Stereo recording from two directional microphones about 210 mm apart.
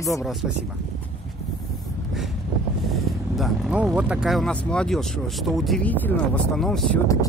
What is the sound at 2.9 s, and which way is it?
Speech, centre (ahead or behind).